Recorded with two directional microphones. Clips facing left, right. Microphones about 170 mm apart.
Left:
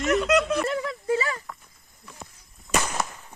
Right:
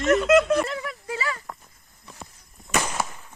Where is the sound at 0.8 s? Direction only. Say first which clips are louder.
Left 5 dB; 25° left (ahead or behind).